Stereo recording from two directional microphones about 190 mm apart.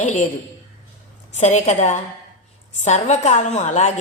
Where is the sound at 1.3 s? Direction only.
35° left (ahead or behind).